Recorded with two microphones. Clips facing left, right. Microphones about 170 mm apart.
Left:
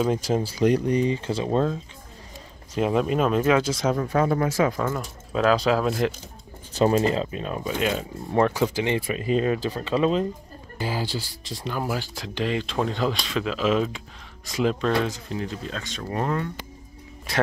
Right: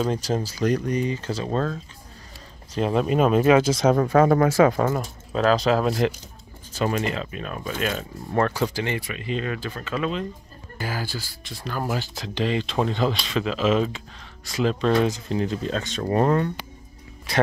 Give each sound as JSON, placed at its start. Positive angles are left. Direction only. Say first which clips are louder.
{"t": 0.0, "sound": "speech", "louder": "left 1 dB", "side_deg": 10}
{"t": 0.6, "sound": "speech", "louder": "left 3 dB", "side_deg": 25}
{"t": 1.4, "sound": "speech", "louder": "left 3 dB", "side_deg": 15}
{"t": 2.7, "sound": "speech", "louder": "even", "side_deg": 5}
{"t": 3.6, "sound": "speech", "louder": "right 5 dB", "side_deg": -85}
{"t": 5.3, "sound": "speech", "louder": "right 1 dB", "side_deg": 5}
{"t": 6.8, "sound": "speech", "louder": "left 5 dB", "side_deg": 30}
{"t": 8.7, "sound": "speech", "louder": "left 3 dB", "side_deg": 25}
{"t": 9.1, "sound": "speech", "louder": "left 5 dB", "side_deg": 40}
{"t": 11.6, "sound": "speech", "louder": "even", "side_deg": 10}
{"t": 15.3, "sound": "speech", "louder": "right 6 dB", "side_deg": -30}
{"t": 16.0, "sound": "speech", "louder": "right 6 dB", "side_deg": -45}